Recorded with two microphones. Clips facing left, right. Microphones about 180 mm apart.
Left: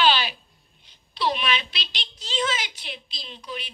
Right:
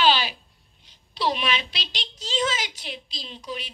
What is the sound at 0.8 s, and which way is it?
A woman's voice, 40° right (ahead or behind).